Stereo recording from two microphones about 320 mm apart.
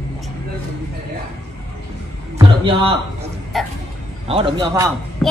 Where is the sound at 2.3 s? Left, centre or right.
Centre.